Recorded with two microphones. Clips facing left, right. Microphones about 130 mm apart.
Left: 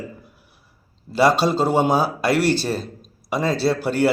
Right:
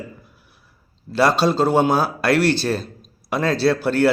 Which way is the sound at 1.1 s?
10° left (ahead or behind).